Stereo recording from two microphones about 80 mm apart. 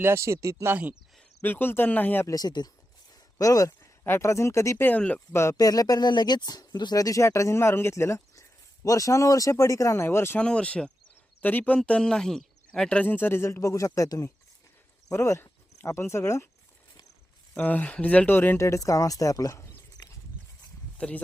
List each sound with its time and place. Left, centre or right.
0.0 s speech: right
1.4 s speech: left
2.2 s speech: left
4.0 s speech: left
4.8 s speech: centre
5.3 s speech: left
5.5 s speech: left
10.3 s speech: centre
11.8 s speech: centre
12.9 s speech: centre; by 14.3 s left
15.9 s speech: left
17.6 s speech: left
18.6 s speech: left
21.0 s speech: centre